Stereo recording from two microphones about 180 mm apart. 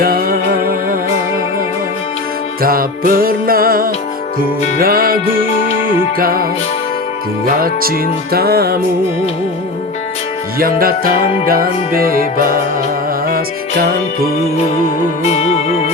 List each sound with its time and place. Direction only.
0.0 s music: 55° right (ahead or behind)
2.6 s music: 55° right (ahead or behind)
10.6 s music: 55° right (ahead or behind)
15.2 s music: 35° left (ahead or behind)